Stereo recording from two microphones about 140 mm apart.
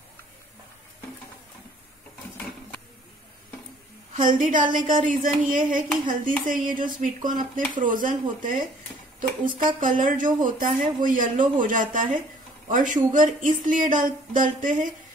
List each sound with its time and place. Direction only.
4.1 s speech: 70° right (ahead or behind)
9.6 s speech: 75° right (ahead or behind)